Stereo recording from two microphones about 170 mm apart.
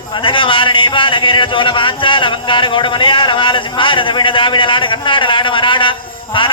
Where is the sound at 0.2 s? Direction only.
30° left (ahead or behind).